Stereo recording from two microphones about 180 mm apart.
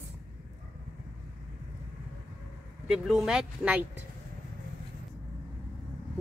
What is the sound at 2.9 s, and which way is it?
Speech, 5° right (ahead or behind).